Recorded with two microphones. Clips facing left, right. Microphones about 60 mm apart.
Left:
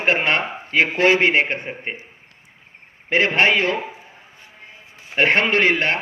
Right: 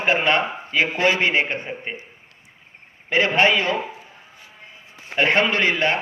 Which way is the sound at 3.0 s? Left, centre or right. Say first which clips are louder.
Left 1 dB; left.